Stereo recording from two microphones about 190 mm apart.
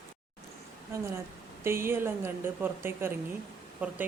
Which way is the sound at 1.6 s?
15° right (ahead or behind).